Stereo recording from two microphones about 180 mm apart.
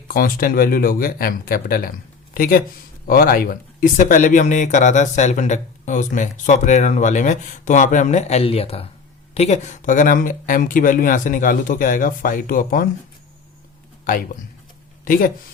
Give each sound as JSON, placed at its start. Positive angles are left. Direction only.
{"t": 0.1, "sound": "speech", "side_deg": 50}
{"t": 15.0, "sound": "speech", "side_deg": 50}